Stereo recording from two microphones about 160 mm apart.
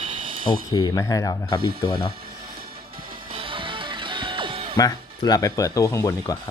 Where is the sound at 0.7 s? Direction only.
25° left (ahead or behind).